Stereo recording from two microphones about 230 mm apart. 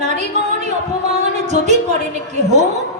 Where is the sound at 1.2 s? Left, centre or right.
Right.